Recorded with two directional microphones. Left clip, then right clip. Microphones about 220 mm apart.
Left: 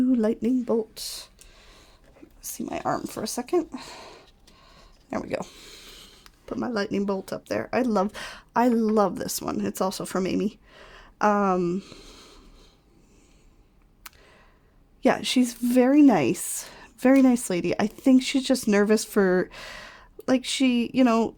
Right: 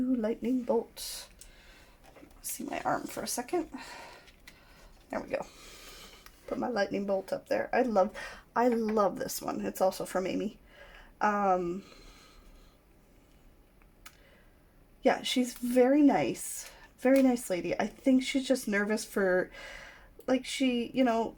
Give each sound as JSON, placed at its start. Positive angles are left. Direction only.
{"t": 0.1, "sound": "speech", "side_deg": 50}
{"t": 2.4, "sound": "speech", "side_deg": 45}
{"t": 5.1, "sound": "speech", "side_deg": 45}
{"t": 14.0, "sound": "a sound", "side_deg": 50}
{"t": 15.0, "sound": "speech", "side_deg": 50}